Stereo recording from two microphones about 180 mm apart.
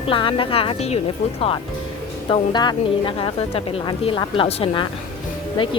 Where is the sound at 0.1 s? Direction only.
30° left (ahead or behind).